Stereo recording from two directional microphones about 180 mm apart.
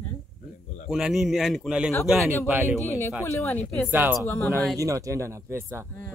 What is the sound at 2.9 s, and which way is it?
Speech, 15° left (ahead or behind).